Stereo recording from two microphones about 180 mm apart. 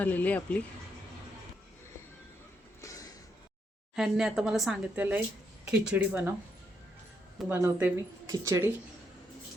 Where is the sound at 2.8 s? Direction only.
20° left (ahead or behind).